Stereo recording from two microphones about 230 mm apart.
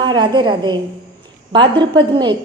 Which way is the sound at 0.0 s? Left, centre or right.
Centre.